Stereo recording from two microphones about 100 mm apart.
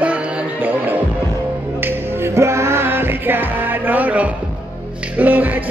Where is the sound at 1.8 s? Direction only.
20° right (ahead or behind).